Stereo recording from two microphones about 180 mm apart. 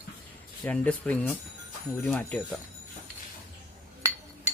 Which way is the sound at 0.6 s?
5° left (ahead or behind).